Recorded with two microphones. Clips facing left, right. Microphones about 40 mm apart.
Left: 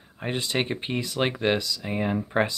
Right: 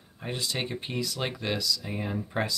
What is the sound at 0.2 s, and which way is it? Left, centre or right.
Speech, left.